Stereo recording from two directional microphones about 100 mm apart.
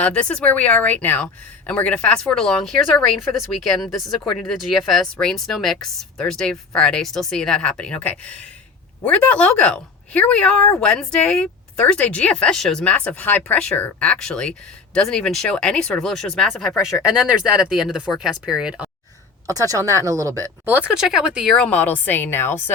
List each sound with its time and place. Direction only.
0.0 s speech: 15° left (ahead or behind); by 18.9 s 10° right (ahead or behind)
19.5 s speech: 35° right (ahead or behind)
20.7 s speech: 20° right (ahead or behind)
20.9 s speech: 5° right (ahead or behind)
21.5 s a woman's voice: 15° left (ahead or behind)